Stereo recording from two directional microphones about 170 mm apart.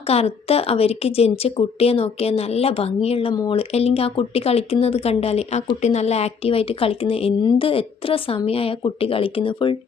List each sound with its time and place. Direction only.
0.1 s speech: 35° left (ahead or behind)